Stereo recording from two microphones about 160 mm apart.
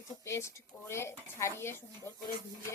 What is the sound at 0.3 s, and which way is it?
Speech, 15° left (ahead or behind).